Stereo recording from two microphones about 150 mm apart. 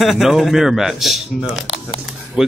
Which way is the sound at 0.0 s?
Centre (ahead or behind).